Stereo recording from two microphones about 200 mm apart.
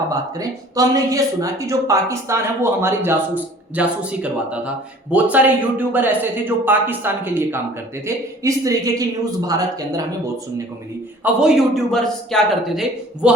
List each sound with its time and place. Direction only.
0.1 s speech: 15° right (ahead or behind)
11.2 s speech: 5° right (ahead or behind)